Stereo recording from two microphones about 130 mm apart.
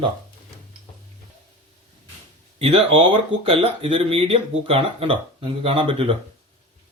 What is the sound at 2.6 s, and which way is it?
Speech, 45° right (ahead or behind).